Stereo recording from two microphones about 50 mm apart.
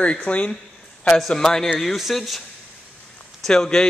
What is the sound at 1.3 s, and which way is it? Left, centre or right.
A man's voice, centre.